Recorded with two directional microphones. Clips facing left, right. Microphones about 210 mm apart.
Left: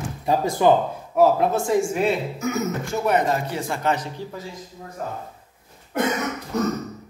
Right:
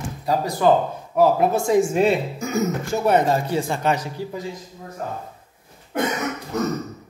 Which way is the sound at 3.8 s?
10° right (ahead or behind).